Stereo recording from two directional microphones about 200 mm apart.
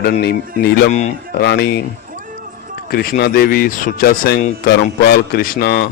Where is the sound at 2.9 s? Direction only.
50° left (ahead or behind).